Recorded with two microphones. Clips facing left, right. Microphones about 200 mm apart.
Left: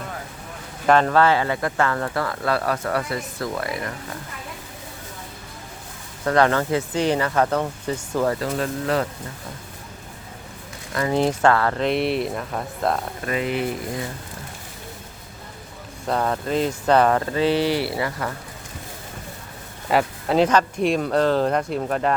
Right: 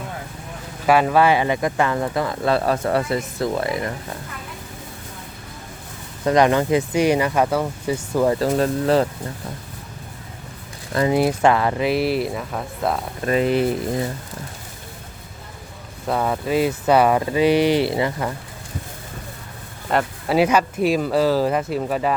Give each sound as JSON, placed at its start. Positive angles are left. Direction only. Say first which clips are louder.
{"t": 0.9, "sound": "speech", "louder": "right 1 dB", "side_deg": -10}
{"t": 6.2, "sound": "speech", "louder": "right 3 dB", "side_deg": -15}
{"t": 8.4, "sound": "speech", "louder": "right 6 dB", "side_deg": -35}
{"t": 11.1, "sound": "speech", "louder": "even", "side_deg": -10}
{"t": 13.2, "sound": "speech", "louder": "right 7 dB", "side_deg": -35}
{"t": 16.0, "sound": "speech", "louder": "right 1 dB", "side_deg": -5}
{"t": 19.9, "sound": "speech", "louder": "even", "side_deg": 0}